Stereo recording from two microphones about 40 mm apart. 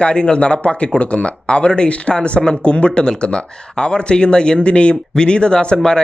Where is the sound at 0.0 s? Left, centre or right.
Left.